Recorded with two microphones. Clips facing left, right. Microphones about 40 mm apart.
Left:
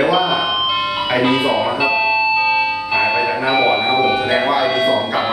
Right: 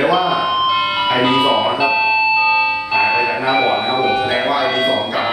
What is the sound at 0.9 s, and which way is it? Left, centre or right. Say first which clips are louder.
Vehicle: right 2 dB; centre.